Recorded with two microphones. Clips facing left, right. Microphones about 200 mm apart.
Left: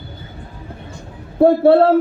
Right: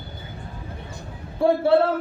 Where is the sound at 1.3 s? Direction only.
55° left (ahead or behind).